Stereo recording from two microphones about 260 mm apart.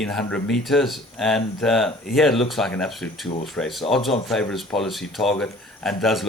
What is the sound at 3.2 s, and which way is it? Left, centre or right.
Speech, centre.